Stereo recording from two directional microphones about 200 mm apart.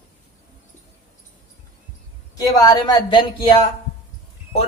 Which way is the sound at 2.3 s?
20° left (ahead or behind).